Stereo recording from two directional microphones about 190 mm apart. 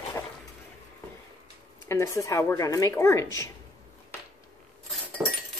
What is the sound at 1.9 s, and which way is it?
A woman's voice, 15° left (ahead or behind).